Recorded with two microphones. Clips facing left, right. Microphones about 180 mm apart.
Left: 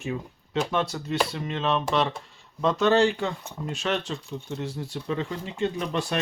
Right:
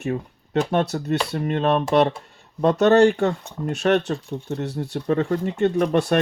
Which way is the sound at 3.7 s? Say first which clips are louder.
Right 9 dB; 60° right (ahead or behind).